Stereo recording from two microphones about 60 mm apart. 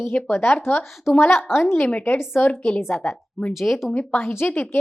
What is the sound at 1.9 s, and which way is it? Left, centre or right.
Speech, left.